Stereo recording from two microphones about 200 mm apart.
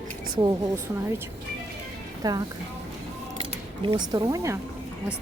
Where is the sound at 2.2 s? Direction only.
20° right (ahead or behind).